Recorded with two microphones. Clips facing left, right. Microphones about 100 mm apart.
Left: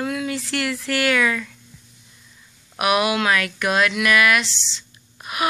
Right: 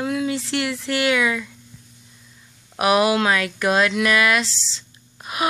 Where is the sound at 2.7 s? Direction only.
30° right (ahead or behind).